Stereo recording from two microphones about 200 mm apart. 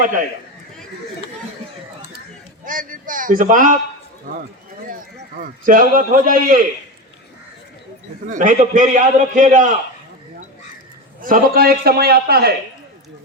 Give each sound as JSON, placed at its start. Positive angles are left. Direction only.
{"t": 2.6, "sound": "a man's voice", "side_deg": -40}
{"t": 5.4, "sound": "a man's voice", "side_deg": -45}
{"t": 8.3, "sound": "a man's voice", "side_deg": -40}
{"t": 11.2, "sound": "a man's voice", "side_deg": -45}